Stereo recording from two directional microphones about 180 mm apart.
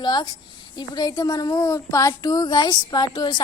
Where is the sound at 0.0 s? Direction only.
25° left (ahead or behind).